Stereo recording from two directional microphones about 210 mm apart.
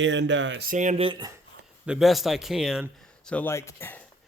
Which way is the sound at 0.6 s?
35° right (ahead or behind).